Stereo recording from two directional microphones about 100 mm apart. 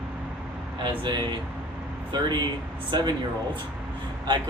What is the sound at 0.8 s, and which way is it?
Speech, 50° right (ahead or behind).